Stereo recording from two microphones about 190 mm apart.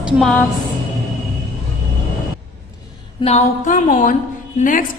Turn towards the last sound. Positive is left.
turn(degrees=45)  # may be behind; listen again after turning